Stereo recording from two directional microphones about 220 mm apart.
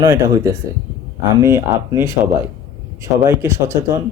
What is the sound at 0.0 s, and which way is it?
Speech, 15° right (ahead or behind).